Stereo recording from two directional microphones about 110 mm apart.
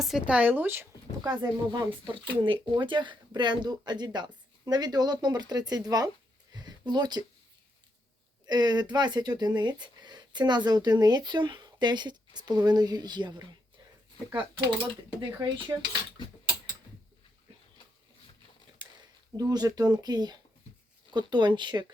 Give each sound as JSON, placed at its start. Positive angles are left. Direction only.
{"t": 0.0, "sound": "speech", "side_deg": -5}
{"t": 1.2, "sound": "speech", "side_deg": -40}
{"t": 6.5, "sound": "a sound", "side_deg": -40}
{"t": 8.4, "sound": "speech", "side_deg": -40}
{"t": 18.8, "sound": "a sound", "side_deg": -45}
{"t": 19.4, "sound": "speech", "side_deg": -35}